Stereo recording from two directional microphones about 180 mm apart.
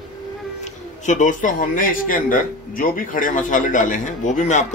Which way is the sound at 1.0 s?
45° left (ahead or behind).